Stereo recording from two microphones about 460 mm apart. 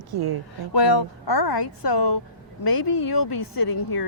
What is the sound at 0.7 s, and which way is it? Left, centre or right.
Speech, left.